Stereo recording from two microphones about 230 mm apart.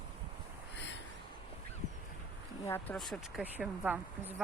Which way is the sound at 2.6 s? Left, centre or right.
Centre.